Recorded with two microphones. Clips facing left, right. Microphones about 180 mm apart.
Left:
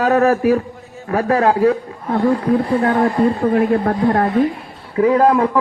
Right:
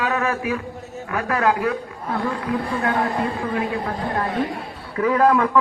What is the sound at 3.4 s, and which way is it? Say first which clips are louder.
Speech: left 9 dB; 50° left (ahead or behind).